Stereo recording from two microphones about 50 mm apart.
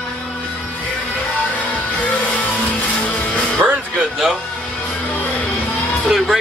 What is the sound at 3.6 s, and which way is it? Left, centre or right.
Music, right.